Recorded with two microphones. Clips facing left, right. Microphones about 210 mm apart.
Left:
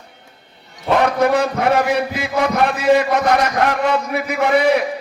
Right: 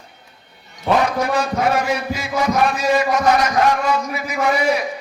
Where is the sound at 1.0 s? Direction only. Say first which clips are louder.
Left 4 dB; 60° left (ahead or behind).